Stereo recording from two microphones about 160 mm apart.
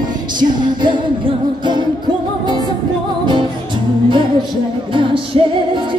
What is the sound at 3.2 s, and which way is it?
Music, 30° right (ahead or behind).